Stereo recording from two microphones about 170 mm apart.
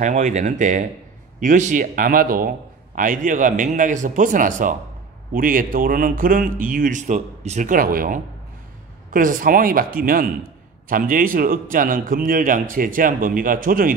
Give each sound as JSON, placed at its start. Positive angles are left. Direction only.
{"t": 0.0, "sound": "a man's voice", "side_deg": -45}